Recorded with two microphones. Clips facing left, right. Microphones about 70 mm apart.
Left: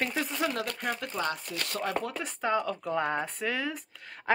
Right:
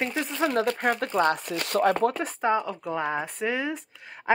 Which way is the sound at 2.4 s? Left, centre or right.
Centre.